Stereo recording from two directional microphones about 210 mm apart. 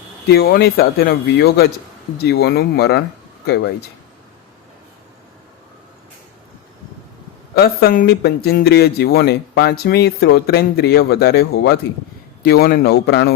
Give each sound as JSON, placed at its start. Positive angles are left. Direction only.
{"t": 0.3, "sound": "speech", "side_deg": 50}
{"t": 7.5, "sound": "speech", "side_deg": 50}